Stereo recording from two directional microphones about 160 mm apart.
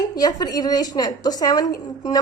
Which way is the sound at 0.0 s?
25° left (ahead or behind).